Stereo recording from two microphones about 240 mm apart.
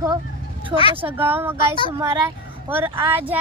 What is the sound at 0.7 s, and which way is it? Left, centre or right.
Speech, centre.